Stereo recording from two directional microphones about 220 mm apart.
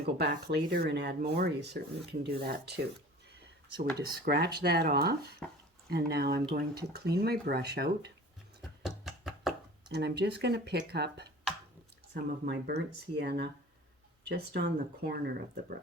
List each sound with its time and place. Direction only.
0.0 s speech: 45° right (ahead or behind)
3.9 s speech: 45° right (ahead or behind)
5.4 s speech: 5° left (ahead or behind)
5.9 s speech: 45° right (ahead or behind)
8.8 s a sound: centre (ahead or behind)
9.9 s speech: 50° right (ahead or behind)